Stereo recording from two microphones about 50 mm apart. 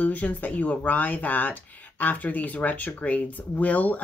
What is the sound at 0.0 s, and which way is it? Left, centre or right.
Speech, left.